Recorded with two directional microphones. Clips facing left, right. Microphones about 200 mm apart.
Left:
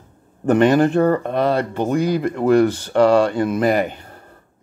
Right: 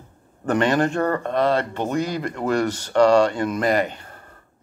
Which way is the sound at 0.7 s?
5° left (ahead or behind).